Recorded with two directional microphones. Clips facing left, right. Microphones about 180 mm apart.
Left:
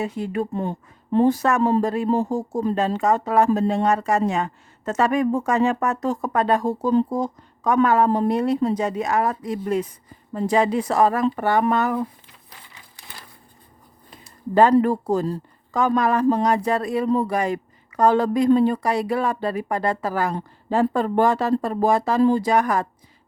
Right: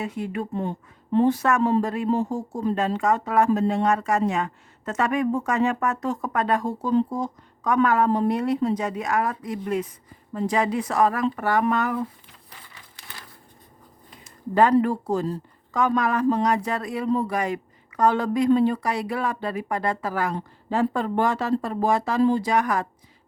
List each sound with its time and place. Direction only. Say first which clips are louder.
0.0 s speech: left 4 dB; 35° left (ahead or behind)
14.5 s speech: left 3 dB; 35° left (ahead or behind)